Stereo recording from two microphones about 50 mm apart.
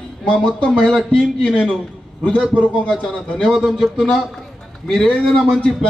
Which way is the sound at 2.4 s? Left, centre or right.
Right.